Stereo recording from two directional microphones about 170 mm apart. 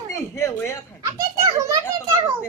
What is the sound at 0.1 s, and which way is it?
Speech, 15° left (ahead or behind).